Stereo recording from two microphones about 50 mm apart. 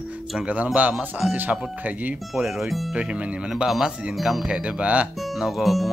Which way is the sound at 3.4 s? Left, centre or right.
Centre.